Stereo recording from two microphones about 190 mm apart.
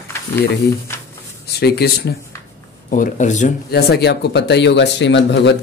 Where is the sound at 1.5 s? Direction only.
60° left (ahead or behind).